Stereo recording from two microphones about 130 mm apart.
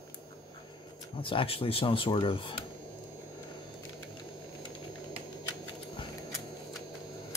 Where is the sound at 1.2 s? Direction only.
45° left (ahead or behind).